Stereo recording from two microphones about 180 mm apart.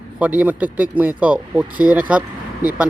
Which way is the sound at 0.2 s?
10° right (ahead or behind).